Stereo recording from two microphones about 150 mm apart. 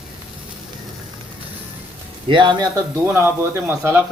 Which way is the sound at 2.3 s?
30° right (ahead or behind).